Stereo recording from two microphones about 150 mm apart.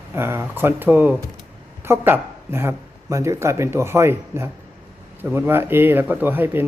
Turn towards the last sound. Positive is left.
turn(degrees=-15)  # may be behind; listen again after turning